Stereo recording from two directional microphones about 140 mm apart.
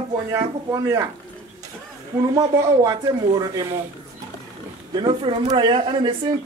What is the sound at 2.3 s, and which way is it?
Speech, 25° right (ahead or behind).